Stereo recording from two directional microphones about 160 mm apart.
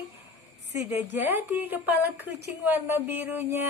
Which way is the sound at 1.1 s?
15° right (ahead or behind).